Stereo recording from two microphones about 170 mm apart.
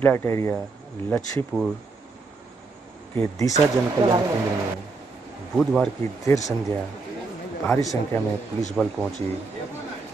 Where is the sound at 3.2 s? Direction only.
20° left (ahead or behind).